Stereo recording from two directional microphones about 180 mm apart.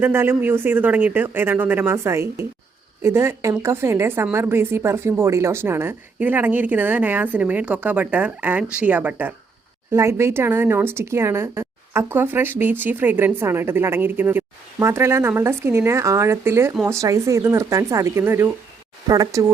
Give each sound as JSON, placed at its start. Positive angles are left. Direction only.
{"t": 0.0, "sound": "speech", "side_deg": -10}